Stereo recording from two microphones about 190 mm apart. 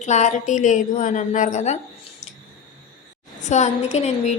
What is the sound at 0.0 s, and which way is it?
A woman's voice, 40° left (ahead or behind).